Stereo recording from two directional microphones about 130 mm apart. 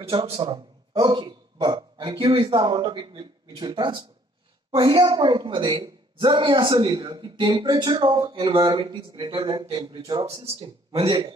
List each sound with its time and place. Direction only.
0.0 s speech: 45° right (ahead or behind)
1.8 s a man's voice: 40° right (ahead or behind)
10.2 s speech: 45° right (ahead or behind)